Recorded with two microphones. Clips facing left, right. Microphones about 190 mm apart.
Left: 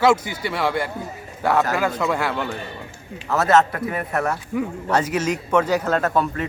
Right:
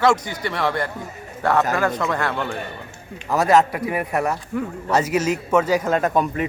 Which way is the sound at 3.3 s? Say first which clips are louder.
Right 1 dB; 10° right (ahead or behind).